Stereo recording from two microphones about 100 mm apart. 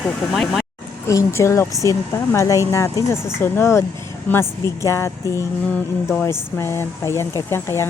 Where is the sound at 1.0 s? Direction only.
30° left (ahead or behind).